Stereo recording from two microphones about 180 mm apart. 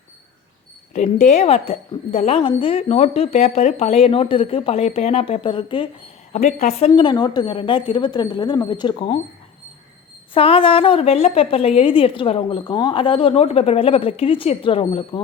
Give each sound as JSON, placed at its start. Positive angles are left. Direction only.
{"t": 0.9, "sound": "speech", "side_deg": 40}
{"t": 6.3, "sound": "a woman's voice", "side_deg": 40}
{"t": 10.3, "sound": "speech", "side_deg": 30}